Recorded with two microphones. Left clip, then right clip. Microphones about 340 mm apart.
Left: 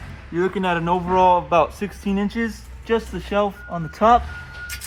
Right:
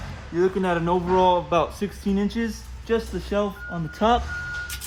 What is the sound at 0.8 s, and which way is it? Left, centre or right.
Speech, left.